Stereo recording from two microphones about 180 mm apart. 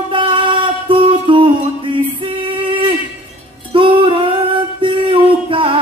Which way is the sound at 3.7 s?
30° right (ahead or behind).